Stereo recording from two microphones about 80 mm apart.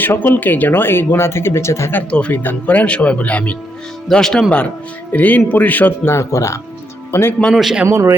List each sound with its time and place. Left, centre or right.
0.0 s speech: left
2.0 s speech: centre
6.1 s speech: left
7.5 s a man's voice: centre
7.9 s a man's voice: right